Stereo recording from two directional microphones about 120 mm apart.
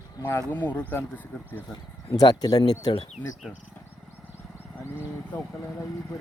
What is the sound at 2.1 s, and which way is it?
Speech, 30° left (ahead or behind).